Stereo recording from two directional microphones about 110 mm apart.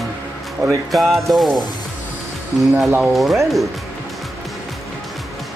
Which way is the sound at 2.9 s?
15° right (ahead or behind).